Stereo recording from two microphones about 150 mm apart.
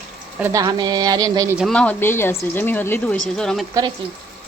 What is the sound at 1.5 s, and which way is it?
Speech, 5° left (ahead or behind).